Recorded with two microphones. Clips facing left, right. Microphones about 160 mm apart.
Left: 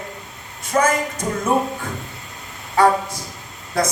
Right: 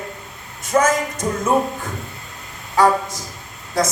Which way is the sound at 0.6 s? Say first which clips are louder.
Right 1 dB; 60° left (ahead or behind).